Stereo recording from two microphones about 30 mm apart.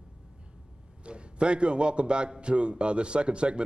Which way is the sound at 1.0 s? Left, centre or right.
Right.